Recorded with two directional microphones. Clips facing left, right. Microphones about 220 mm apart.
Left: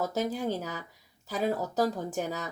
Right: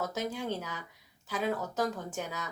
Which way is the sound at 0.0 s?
35° left (ahead or behind).